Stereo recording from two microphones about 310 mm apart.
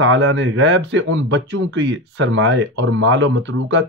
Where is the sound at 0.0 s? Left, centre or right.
Right.